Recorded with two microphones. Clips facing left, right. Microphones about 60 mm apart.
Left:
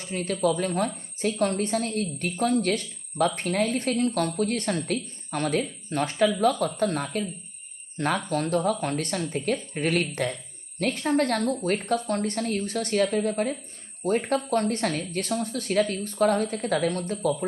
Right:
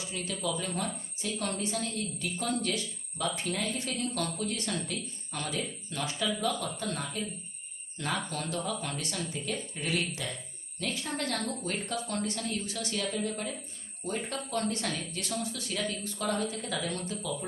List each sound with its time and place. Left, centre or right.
0.0 s a woman's voice: left